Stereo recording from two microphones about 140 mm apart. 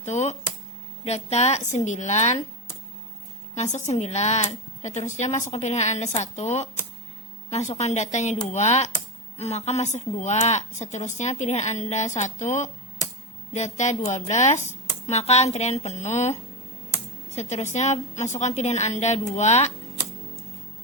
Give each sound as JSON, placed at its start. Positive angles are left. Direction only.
{"t": 0.0, "sound": "a sound", "side_deg": 55}
{"t": 1.0, "sound": "a woman's voice", "side_deg": 50}
{"t": 3.5, "sound": "a woman's voice", "side_deg": 55}